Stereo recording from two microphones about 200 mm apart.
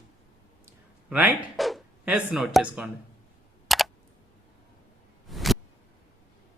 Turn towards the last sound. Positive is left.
turn(degrees=0)  # may be behind; listen again after turning